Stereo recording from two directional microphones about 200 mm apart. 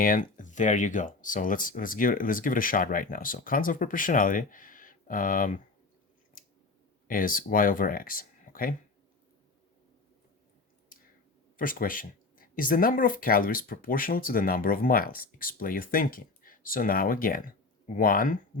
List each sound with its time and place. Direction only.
0.0 s speech: 40° left (ahead or behind)
7.1 s speech: 45° left (ahead or behind)
11.5 s speech: 45° left (ahead or behind)